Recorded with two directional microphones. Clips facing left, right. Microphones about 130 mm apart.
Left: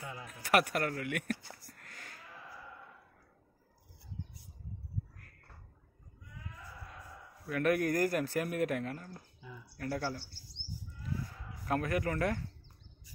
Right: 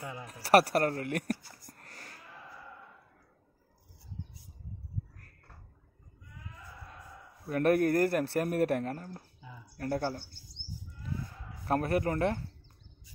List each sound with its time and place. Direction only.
0.0 s speech: 35° right (ahead or behind)
7.4 s a man's voice: 40° right (ahead or behind)
11.6 s a man's voice: 35° right (ahead or behind)